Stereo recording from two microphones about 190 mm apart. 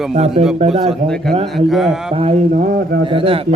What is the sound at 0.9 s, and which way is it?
Speech, centre (ahead or behind).